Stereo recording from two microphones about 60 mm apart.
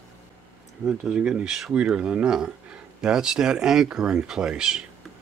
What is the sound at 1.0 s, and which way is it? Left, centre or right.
Speech, centre.